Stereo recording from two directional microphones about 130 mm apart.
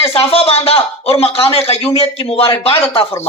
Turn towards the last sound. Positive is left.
turn(degrees=45)  # may be behind; listen again after turning